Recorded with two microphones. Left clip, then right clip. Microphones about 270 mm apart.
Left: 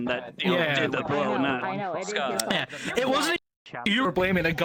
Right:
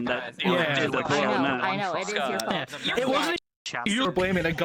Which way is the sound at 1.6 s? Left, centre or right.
Right.